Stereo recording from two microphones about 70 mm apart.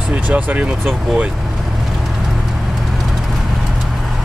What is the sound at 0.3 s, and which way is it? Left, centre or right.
Speech, right.